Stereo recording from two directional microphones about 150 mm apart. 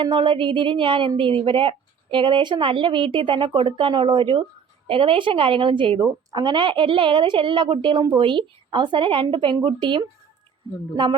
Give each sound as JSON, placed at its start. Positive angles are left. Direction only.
{"t": 0.0, "sound": "a woman's voice", "side_deg": -35}